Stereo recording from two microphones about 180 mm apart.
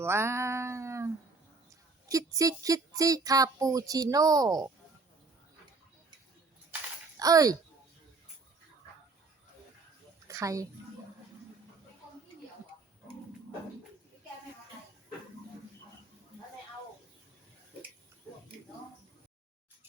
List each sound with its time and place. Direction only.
0.0 s music: 15° right (ahead or behind)
2.0 s speech: 20° right (ahead or behind)
7.2 s speech: 20° right (ahead or behind)
10.2 s a child's voice: 15° right (ahead or behind)